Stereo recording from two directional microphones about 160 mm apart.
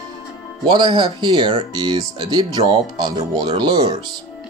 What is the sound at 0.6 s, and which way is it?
Speech, 30° right (ahead or behind).